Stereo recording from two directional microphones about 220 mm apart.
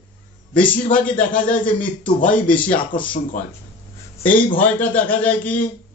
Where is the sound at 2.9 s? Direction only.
20° left (ahead or behind).